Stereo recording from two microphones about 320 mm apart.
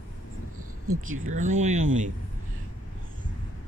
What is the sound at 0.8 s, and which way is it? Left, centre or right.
Speech, right.